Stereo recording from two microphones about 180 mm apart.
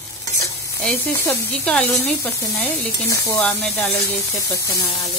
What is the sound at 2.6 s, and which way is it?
Speech, 20° left (ahead or behind).